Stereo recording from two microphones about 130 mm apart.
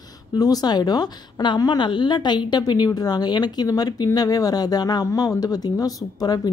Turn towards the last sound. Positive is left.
turn(degrees=30)  # may be behind; listen again after turning